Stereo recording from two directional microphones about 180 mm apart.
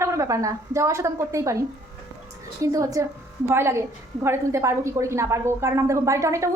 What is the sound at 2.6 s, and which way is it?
A woman's voice, 20° right (ahead or behind).